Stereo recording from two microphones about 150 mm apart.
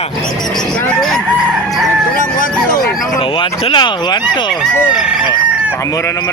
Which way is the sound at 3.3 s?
35° left (ahead or behind).